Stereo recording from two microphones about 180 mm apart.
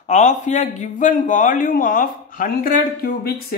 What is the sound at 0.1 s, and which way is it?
Speech, 40° left (ahead or behind).